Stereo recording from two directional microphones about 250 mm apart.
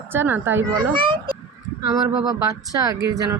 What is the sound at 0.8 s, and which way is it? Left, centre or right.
A child's voice, centre.